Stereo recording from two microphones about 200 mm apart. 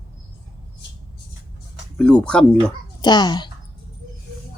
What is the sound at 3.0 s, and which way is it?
Speech, 20° left (ahead or behind).